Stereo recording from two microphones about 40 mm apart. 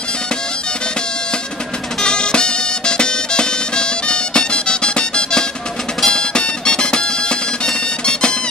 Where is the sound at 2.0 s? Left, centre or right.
Left.